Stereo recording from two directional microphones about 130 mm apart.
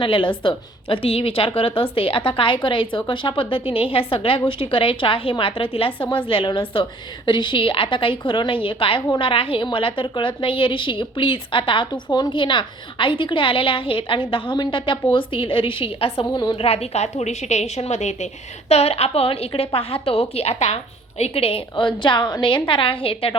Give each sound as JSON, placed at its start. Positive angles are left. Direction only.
{"t": 0.0, "sound": "a woman's voice", "side_deg": 40}
{"t": 16.2, "sound": "a woman's voice", "side_deg": 35}